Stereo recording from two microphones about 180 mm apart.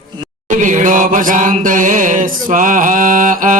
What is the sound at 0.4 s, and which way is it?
Chant, 45° right (ahead or behind).